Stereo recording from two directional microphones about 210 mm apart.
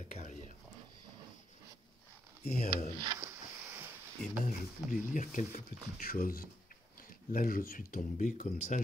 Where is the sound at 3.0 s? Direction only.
15° right (ahead or behind).